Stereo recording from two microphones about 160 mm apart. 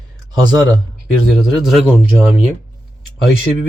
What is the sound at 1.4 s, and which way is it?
Speech, centre (ahead or behind).